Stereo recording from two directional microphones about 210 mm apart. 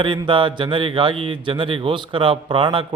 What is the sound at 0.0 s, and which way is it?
A man's voice, 25° right (ahead or behind).